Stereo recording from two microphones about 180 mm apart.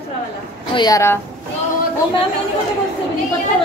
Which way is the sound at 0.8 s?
20° left (ahead or behind).